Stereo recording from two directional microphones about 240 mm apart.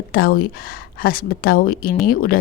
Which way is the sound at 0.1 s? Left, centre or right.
Left.